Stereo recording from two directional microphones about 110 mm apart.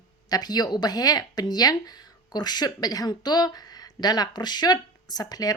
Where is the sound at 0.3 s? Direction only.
35° left (ahead or behind).